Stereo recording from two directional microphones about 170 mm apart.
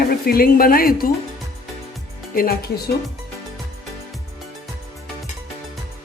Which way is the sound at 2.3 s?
60° left (ahead or behind).